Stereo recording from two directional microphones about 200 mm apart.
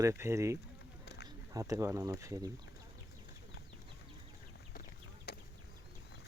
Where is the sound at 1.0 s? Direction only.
55° left (ahead or behind).